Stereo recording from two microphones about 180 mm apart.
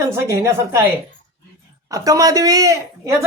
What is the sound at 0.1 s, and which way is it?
Speech, 15° right (ahead or behind).